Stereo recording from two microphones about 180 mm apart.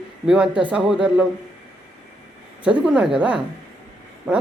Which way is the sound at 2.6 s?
5° right (ahead or behind).